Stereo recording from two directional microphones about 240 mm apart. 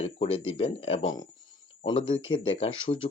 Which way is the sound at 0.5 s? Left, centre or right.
Left.